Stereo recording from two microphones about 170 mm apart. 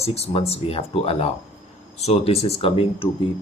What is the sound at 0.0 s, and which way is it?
Speech, 35° left (ahead or behind).